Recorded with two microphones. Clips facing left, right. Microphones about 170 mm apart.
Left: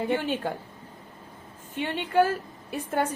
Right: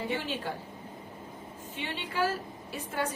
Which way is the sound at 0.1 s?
55° left (ahead or behind).